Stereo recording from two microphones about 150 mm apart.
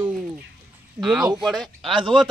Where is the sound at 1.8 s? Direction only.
35° right (ahead or behind).